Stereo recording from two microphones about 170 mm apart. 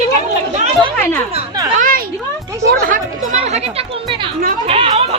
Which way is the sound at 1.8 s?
55° right (ahead or behind).